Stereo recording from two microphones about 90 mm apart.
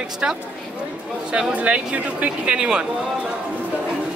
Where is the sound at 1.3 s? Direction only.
15° right (ahead or behind).